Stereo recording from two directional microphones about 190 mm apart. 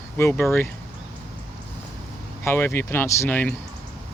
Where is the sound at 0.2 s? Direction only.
15° left (ahead or behind).